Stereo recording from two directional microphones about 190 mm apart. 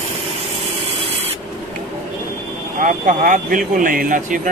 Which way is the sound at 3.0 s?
45° right (ahead or behind).